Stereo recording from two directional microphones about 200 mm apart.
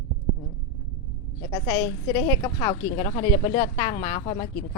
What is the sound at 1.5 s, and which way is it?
Speech, 20° left (ahead or behind).